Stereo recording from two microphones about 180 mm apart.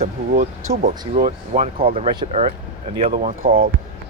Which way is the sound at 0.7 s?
50° right (ahead or behind).